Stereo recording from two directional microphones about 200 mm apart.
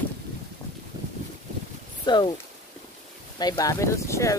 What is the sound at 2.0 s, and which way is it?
Speech, 20° left (ahead or behind).